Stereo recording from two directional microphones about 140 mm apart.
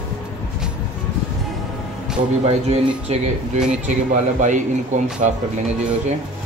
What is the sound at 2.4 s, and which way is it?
Speech, 50° right (ahead or behind).